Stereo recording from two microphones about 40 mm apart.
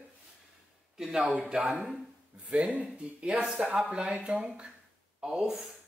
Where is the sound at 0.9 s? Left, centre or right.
Centre.